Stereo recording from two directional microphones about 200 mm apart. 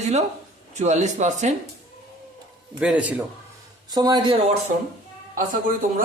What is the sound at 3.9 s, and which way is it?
Speech, 20° right (ahead or behind).